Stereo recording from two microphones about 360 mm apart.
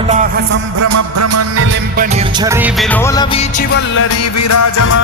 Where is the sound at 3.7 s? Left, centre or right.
Left.